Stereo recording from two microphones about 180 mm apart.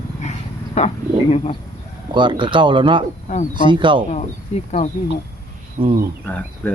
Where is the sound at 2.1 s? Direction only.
25° right (ahead or behind).